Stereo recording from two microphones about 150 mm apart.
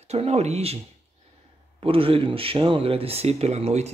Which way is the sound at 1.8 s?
35° right (ahead or behind).